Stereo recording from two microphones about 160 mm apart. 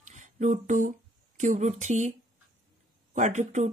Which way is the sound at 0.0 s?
50° right (ahead or behind).